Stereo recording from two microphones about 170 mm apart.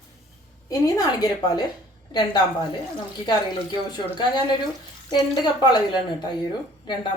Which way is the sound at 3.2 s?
25° left (ahead or behind).